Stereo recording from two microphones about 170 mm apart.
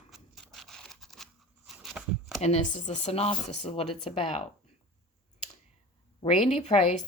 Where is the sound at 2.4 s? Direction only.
40° left (ahead or behind).